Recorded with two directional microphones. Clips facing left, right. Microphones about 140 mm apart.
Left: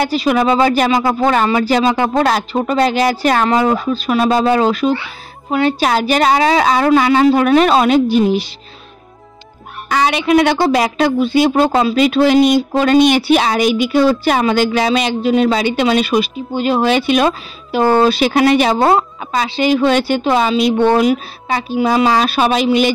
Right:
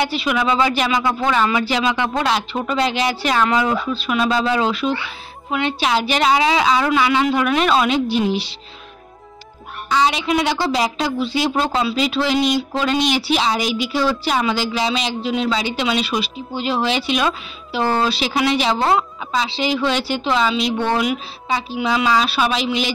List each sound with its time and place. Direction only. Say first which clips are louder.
0.0 s speech: left 6 dB; 40° left (ahead or behind)
9.8 s speech: left 4 dB; 60° left (ahead or behind)
21.5 s a woman's voice: left 3 dB; 55° left (ahead or behind)
21.7 s speech: left 6 dB; 45° left (ahead or behind)